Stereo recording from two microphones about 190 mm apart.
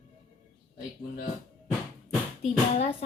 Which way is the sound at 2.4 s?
30° left (ahead or behind).